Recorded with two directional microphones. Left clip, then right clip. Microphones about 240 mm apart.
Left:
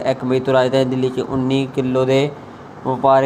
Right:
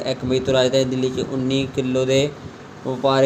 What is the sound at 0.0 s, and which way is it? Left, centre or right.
Speech, centre.